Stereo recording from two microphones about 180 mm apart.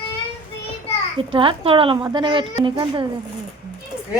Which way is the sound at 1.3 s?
30° right (ahead or behind).